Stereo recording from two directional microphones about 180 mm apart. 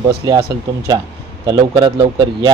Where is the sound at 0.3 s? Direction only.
20° right (ahead or behind).